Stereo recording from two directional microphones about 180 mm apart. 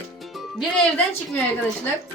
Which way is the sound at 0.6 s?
5° left (ahead or behind).